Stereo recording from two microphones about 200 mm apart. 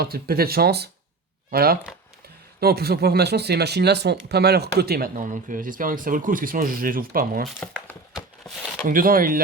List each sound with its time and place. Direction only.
0.0 s speech: 50° right (ahead or behind)
8.9 s speech: 45° right (ahead or behind)